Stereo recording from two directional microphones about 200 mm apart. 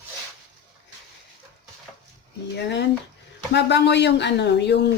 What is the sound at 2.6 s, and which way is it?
Speech, 60° left (ahead or behind).